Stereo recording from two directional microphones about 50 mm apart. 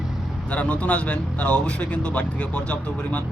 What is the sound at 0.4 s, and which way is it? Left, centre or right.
Speech, left.